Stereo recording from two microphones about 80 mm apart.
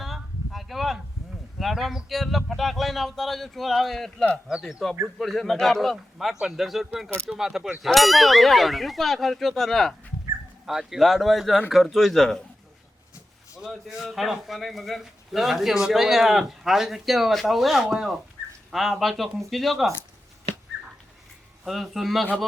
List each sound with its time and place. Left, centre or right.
0.0 s a sound: centre
1.5 s a man's voice: centre
13.6 s a man's voice: centre
21.6 s a man's voice: centre